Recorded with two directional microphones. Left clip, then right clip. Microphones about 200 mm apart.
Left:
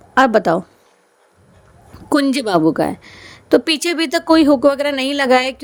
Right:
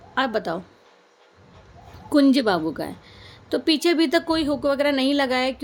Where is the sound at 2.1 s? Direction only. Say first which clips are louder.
Left 3 dB; 45° left (ahead or behind).